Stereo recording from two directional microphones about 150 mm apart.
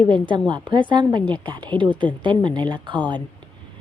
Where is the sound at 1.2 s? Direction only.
10° left (ahead or behind).